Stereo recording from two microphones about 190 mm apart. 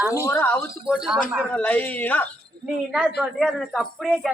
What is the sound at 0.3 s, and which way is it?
Speech, 10° left (ahead or behind).